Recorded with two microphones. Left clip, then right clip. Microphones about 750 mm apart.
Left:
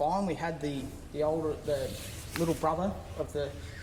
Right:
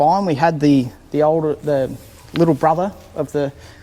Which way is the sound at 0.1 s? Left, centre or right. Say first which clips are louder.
Right 16 dB; right.